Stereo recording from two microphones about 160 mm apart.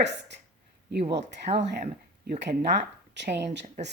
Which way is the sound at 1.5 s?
45° right (ahead or behind).